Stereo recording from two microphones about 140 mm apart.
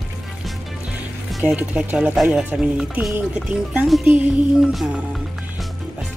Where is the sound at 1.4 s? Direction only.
10° right (ahead or behind).